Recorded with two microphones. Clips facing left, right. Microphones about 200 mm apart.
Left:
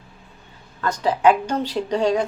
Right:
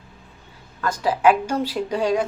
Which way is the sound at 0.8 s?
5° right (ahead or behind).